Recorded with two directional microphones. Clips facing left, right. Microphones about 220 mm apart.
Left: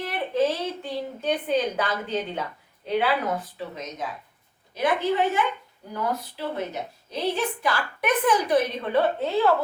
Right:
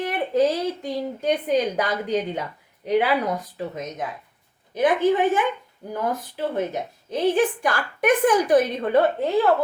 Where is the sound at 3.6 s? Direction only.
50° right (ahead or behind).